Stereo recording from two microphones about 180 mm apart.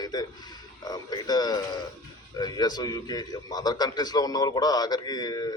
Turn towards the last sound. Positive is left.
turn(degrees=25)  # may be behind; listen again after turning